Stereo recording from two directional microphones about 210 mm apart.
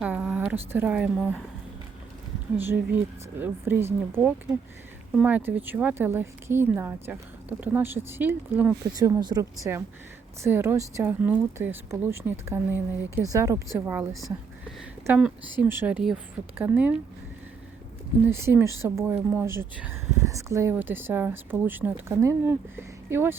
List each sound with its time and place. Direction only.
0.0 s a woman's voice: 5° right (ahead or behind)
2.6 s speech: 10° right (ahead or behind)
18.3 s speech: 10° right (ahead or behind)